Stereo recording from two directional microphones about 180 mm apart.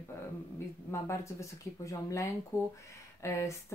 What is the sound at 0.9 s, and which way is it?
Speech, 15° left (ahead or behind).